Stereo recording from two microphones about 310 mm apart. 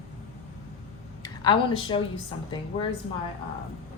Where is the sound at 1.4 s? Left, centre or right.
Centre.